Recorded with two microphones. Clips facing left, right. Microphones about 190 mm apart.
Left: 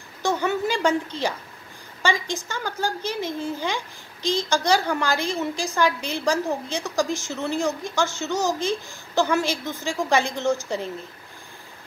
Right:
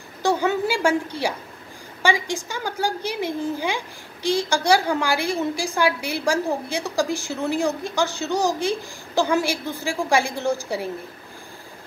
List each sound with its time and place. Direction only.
0.4 s a woman's voice: 10° right (ahead or behind)